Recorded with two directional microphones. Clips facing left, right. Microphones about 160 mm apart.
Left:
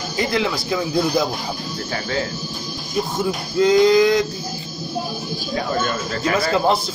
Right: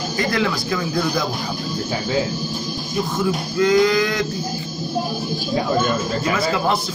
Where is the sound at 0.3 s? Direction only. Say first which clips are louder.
Even; 20° left (ahead or behind).